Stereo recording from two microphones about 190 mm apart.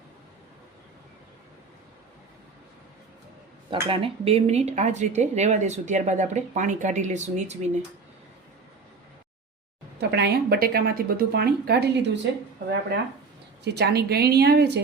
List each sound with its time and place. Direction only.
3.7 s speech: 30° right (ahead or behind)
10.0 s speech: 60° right (ahead or behind)
13.7 s speech: 60° right (ahead or behind)